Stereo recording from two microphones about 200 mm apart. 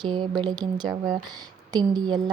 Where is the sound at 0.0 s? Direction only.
20° right (ahead or behind).